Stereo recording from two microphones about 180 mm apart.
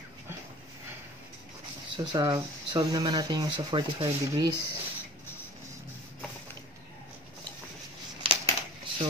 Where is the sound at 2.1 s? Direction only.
20° right (ahead or behind).